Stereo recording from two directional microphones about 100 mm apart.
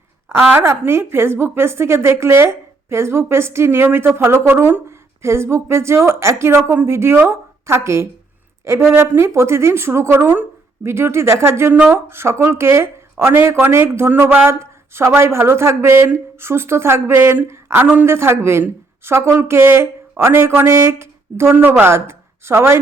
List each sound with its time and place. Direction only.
0.3 s a woman's voice: 25° right (ahead or behind)